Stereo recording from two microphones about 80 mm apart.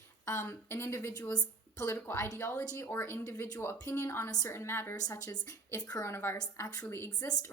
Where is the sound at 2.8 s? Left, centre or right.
Left.